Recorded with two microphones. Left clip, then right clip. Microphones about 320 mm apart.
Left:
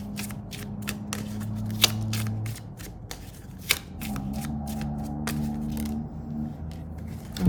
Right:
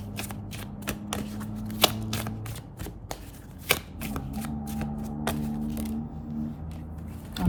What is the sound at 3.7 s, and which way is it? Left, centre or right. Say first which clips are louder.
Shuffling cards: even; centre.